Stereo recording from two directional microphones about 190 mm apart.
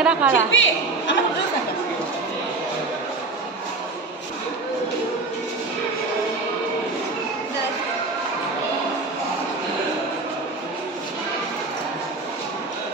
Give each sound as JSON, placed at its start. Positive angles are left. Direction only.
{"t": 0.0, "sound": "a woman's voice", "side_deg": -5}
{"t": 0.3, "sound": "a woman's voice", "side_deg": 85}